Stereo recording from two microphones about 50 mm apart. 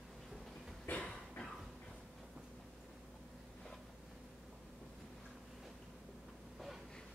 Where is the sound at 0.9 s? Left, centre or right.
Left.